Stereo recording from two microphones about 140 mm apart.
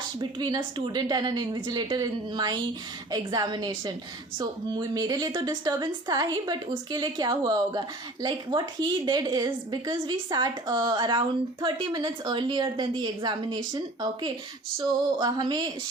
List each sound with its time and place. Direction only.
0.2 s a woman's voice: 30° right (ahead or behind)